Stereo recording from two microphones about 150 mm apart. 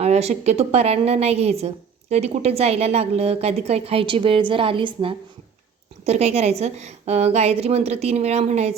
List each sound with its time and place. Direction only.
0.0 s a woman's voice: 45° right (ahead or behind)
6.1 s a woman's voice: 45° right (ahead or behind)